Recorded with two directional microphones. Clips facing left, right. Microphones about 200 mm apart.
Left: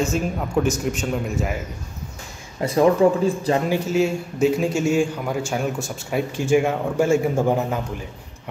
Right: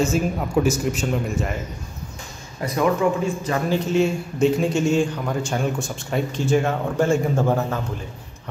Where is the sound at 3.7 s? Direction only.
5° left (ahead or behind).